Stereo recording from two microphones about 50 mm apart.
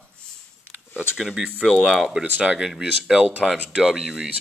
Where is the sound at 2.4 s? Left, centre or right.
Centre.